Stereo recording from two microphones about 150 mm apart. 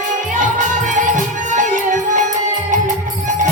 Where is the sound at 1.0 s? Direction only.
55° right (ahead or behind).